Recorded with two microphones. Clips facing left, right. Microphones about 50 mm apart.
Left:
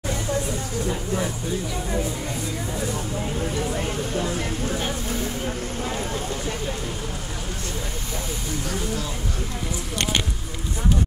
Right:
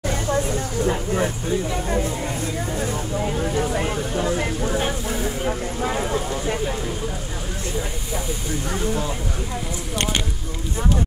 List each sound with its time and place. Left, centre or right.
0.0 s vehicle: right
1.1 s speech: right
3.2 s a sound: right
8.6 s speech: right